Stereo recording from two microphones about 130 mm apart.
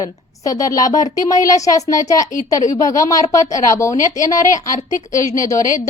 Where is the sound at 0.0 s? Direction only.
25° left (ahead or behind).